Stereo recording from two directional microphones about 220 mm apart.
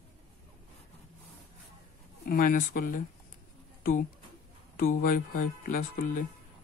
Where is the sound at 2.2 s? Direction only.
40° left (ahead or behind).